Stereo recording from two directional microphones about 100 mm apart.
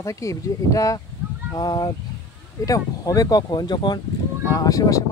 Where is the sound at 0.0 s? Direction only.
30° left (ahead or behind).